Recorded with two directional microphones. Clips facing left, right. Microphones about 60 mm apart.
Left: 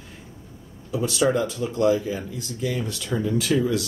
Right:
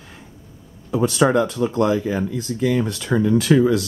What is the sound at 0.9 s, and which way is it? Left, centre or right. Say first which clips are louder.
Speech: right 5 dB; right.